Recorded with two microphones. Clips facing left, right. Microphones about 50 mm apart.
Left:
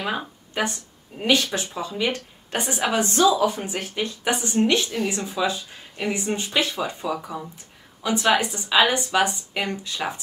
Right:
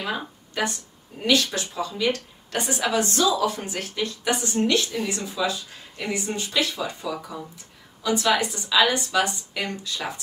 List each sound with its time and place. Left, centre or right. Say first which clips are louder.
0.0 s a woman's voice: left 2 dB; centre